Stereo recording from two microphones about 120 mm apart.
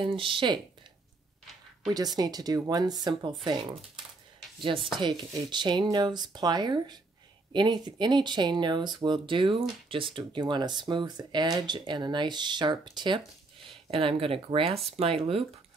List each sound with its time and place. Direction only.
0.0 s speech: 45° right (ahead or behind)
1.9 s speech: 35° right (ahead or behind)
4.6 s speech: 45° right (ahead or behind)
13.8 s speech: 50° right (ahead or behind)